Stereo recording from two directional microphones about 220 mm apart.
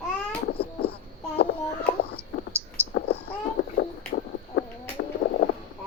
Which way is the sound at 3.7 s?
45° left (ahead or behind).